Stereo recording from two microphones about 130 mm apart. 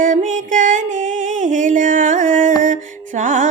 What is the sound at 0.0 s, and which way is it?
Music, 85° right.